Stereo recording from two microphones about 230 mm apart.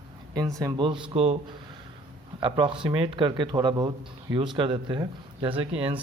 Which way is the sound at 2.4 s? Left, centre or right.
Right.